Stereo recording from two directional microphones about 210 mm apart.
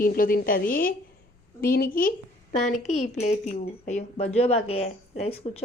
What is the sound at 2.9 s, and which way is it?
Speech, 30° left (ahead or behind).